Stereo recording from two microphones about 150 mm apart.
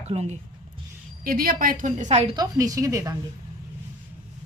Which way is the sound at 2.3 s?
25° right (ahead or behind).